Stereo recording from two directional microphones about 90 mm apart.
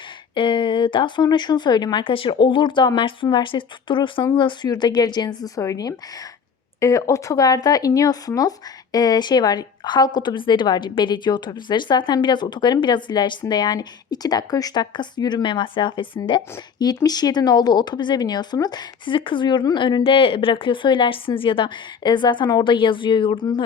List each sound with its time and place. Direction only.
0.3 s speech: 65° left (ahead or behind)
4.7 s a woman's voice: 50° left (ahead or behind)
5.5 s a woman's voice: 40° left (ahead or behind); by 23.5 s 65° left (ahead or behind)